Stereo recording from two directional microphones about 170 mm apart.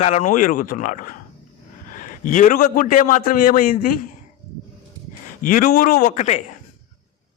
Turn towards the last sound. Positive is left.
turn(degrees=45)  # may be behind; listen again after turning